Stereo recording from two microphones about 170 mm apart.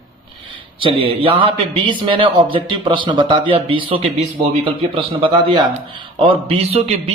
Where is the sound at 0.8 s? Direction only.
30° right (ahead or behind).